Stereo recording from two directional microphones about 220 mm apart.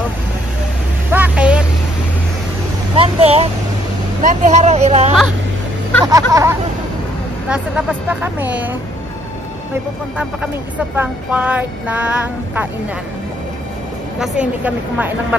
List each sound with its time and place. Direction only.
1.1 s vehicle: 5° right (ahead or behind)
3.0 s vehicle: 25° right (ahead or behind)
6.0 s speech: 15° right (ahead or behind)
11.0 s speech: 5° right (ahead or behind)
14.2 s speech: 5° right (ahead or behind)